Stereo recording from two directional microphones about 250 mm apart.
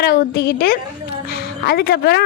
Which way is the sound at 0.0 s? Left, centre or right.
Left.